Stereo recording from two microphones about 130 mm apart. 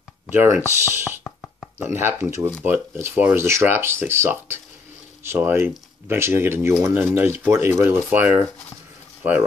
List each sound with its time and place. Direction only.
0.3 s speech: 15° right (ahead or behind)
1.2 s plop: 10° left (ahead or behind)
1.8 s speech: 15° right (ahead or behind)